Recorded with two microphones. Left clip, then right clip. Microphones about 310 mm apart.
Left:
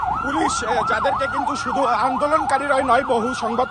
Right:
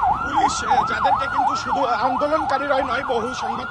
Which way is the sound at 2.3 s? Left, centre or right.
Centre.